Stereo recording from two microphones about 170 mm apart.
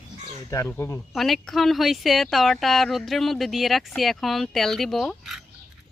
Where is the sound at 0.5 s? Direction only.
15° left (ahead or behind).